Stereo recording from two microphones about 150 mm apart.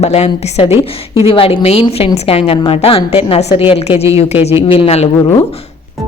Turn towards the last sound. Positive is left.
turn(degrees=45)  # may be behind; listen again after turning